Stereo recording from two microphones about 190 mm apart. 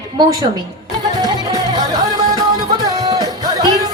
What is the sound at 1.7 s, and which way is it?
Music, 20° right (ahead or behind).